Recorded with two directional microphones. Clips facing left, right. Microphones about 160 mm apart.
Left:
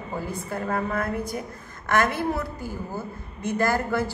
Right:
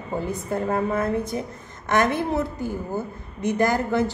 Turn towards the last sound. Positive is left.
turn(degrees=-20)  # may be behind; listen again after turning